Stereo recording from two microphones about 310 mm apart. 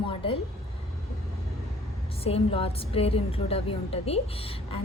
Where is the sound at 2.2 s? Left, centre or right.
Centre.